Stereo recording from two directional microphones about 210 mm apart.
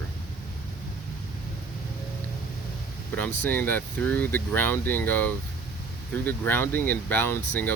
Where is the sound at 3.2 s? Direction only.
10° left (ahead or behind).